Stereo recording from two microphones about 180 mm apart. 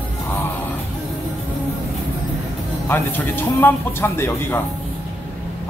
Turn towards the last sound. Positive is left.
turn(degrees=10)  # may be behind; listen again after turning